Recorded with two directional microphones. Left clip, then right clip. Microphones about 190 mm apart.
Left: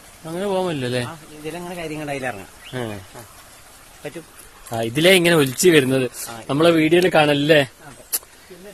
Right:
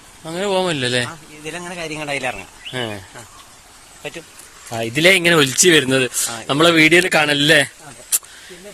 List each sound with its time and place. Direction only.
0.3 s speech: centre (ahead or behind)
1.5 s speech: 25° left (ahead or behind)
2.7 s speech: centre (ahead or behind)
4.7 s a man's voice: 15° left (ahead or behind); by 7.7 s 10° right (ahead or behind)